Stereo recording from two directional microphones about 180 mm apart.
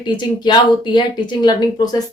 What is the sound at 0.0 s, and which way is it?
Speech, 25° left (ahead or behind).